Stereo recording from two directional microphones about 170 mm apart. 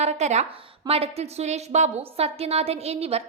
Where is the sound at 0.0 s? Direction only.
40° right (ahead or behind).